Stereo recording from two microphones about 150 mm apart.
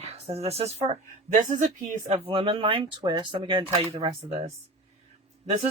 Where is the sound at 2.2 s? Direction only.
35° right (ahead or behind).